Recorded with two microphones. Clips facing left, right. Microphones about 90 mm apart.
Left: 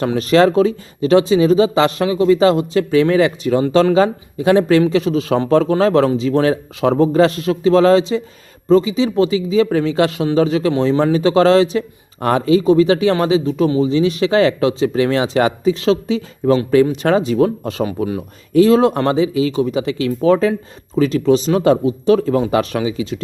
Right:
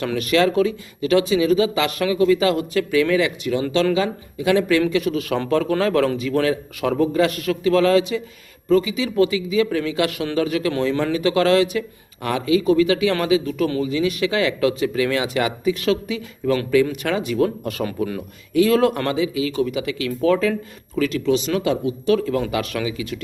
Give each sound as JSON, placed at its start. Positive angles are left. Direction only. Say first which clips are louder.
{"t": 0.0, "sound": "speech", "louder": "left 6 dB", "side_deg": 30}